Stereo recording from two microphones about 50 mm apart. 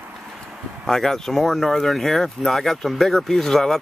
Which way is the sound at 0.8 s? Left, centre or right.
Centre.